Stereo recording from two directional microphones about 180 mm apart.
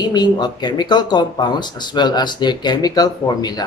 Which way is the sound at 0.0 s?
25° left (ahead or behind).